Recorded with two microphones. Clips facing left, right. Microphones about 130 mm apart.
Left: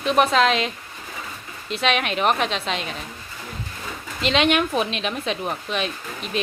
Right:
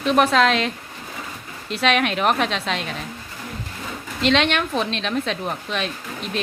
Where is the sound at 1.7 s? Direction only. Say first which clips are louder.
Right 2 dB; centre (ahead or behind).